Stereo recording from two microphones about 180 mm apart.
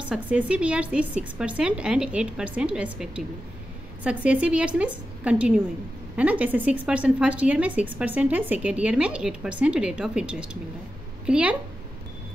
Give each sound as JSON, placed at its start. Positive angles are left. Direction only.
{"t": 0.0, "sound": "a woman's voice", "side_deg": -10}